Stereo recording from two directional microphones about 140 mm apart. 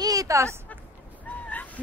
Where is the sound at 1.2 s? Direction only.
10° left (ahead or behind).